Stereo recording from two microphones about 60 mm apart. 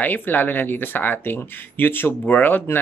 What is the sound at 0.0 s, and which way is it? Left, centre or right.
Speech, left.